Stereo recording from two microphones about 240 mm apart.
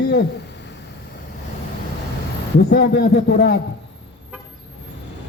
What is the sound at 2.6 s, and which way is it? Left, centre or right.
Speech, left.